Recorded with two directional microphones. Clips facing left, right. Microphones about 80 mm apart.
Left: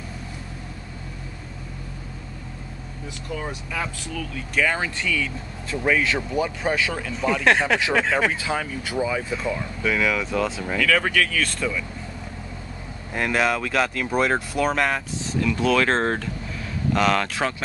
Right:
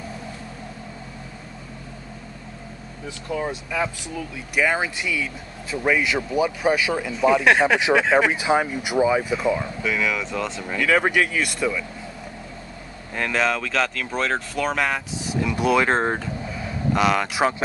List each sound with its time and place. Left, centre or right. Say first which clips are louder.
3.3 s speech: right 5 dB; centre
8.3 s speech: right 6 dB; right
9.8 s speech: left 2 dB; centre
10.8 s speech: right 2 dB; right
13.1 s speech: left 1 dB; centre
15.2 s speech: even; centre